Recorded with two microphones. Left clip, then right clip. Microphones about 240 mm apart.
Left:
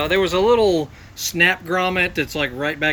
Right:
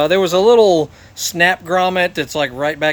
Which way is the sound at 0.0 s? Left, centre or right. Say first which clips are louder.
Right 5 dB; right.